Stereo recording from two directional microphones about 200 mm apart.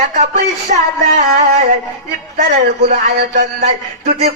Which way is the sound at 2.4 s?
50° right (ahead or behind).